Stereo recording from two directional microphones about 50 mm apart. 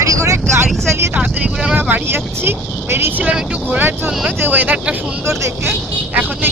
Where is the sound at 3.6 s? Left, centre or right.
Right.